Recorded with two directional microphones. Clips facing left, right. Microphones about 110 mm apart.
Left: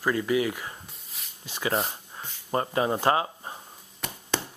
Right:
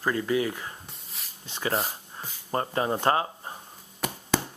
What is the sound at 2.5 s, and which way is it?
Speech, 20° left (ahead or behind).